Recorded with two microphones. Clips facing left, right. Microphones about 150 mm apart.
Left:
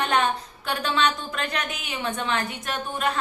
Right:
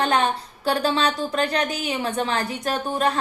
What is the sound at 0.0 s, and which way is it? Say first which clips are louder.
A woman's voice: right 2 dB; 30° right (ahead or behind).